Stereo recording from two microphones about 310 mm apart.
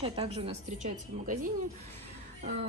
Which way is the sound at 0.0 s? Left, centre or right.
Centre.